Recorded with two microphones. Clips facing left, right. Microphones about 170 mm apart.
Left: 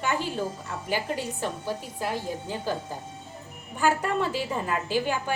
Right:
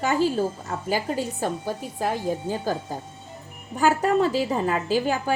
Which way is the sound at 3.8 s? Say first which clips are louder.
Right 5 dB; 40° right (ahead or behind).